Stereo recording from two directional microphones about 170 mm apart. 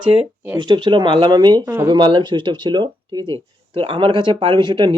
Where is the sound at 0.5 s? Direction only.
25° right (ahead or behind).